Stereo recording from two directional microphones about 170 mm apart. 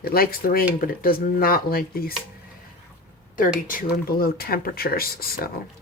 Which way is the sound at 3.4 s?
55° left (ahead or behind).